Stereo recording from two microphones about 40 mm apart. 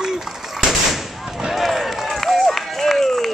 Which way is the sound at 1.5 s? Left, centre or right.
Centre.